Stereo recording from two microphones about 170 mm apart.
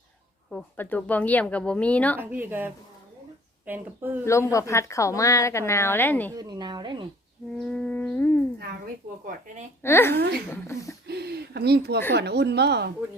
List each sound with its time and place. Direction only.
0.5 s a woman's voice: 10° left (ahead or behind)
2.1 s speech: 10° right (ahead or behind)
4.5 s a woman's voice: 15° left (ahead or behind)
6.3 s speech: 25° right (ahead or behind)
7.5 s a woman's voice: 5° left (ahead or behind)
9.8 s a woman's voice: 15° left (ahead or behind)
11.0 s speech: 75° right (ahead or behind)